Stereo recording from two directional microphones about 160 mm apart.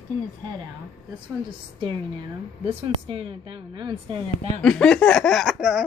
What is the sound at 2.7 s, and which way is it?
Speech, 35° right (ahead or behind).